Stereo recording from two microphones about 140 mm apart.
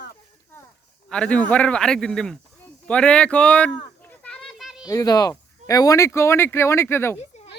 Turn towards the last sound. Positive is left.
turn(degrees=50)  # may be behind; listen again after turning